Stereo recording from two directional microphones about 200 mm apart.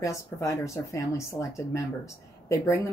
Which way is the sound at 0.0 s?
15° left (ahead or behind).